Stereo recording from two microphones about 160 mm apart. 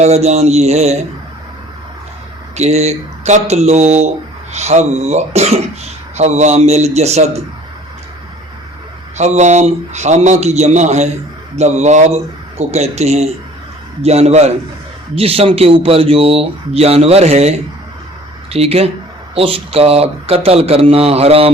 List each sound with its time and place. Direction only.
0.0 s speech: 40° right (ahead or behind)
2.6 s speech: 40° right (ahead or behind)
9.1 s speech: 45° right (ahead or behind)
18.5 s speech: 40° right (ahead or behind)